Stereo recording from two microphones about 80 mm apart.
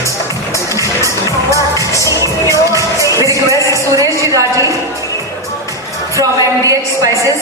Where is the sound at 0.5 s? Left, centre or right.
Left.